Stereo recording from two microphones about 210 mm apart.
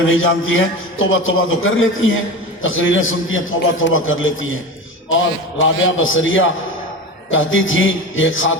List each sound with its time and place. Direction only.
0.1 s a man's voice: 70° left (ahead or behind)